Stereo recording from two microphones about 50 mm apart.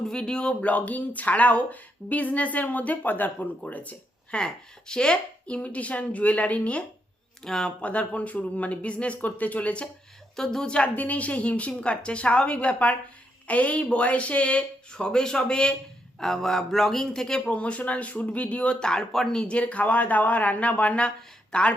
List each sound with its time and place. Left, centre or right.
0.1 s speech: centre
0.7 s speech: left
4.4 s speech: centre
7.4 s a man's voice: centre
7.8 s speech: left
10.3 s a man's voice: centre
10.8 s a man's voice: left; by 17.5 s centre
17.5 s speech: left
18.8 s a man's voice: centre
19.5 s speech: left